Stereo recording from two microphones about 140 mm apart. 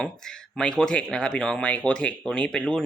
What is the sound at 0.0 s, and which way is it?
Speech, 5° left (ahead or behind).